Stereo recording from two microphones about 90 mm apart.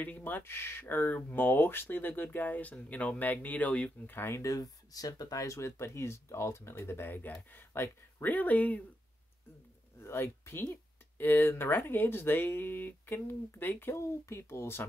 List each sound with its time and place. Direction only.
0.0 s speech: 20° left (ahead or behind)
9.9 s speech: 30° left (ahead or behind)